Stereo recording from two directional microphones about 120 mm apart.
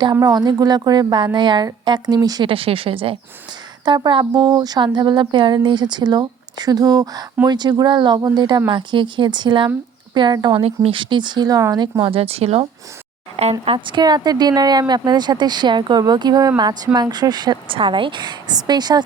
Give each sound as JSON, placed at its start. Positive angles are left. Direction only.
{"t": 0.0, "sound": "speech", "side_deg": -30}
{"t": 2.5, "sound": "speech", "side_deg": -50}
{"t": 3.8, "sound": "speech", "side_deg": -40}
{"t": 10.6, "sound": "speech", "side_deg": -50}
{"t": 12.1, "sound": "speech", "side_deg": -55}
{"t": 13.7, "sound": "speech", "side_deg": -40}